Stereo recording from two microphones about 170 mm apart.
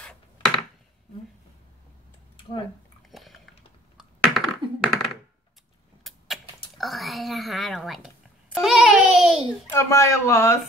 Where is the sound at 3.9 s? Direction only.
Centre (ahead or behind).